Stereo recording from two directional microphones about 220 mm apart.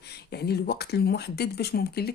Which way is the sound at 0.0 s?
45° left (ahead or behind).